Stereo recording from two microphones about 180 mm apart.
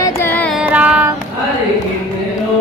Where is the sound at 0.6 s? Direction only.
5° right (ahead or behind).